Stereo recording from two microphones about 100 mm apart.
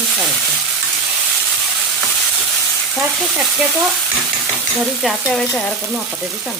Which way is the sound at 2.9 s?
5° right (ahead or behind).